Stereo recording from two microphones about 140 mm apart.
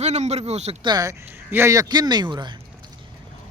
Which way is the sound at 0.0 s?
50° right (ahead or behind).